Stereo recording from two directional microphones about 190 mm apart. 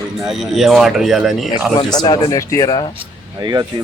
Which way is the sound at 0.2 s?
Centre (ahead or behind).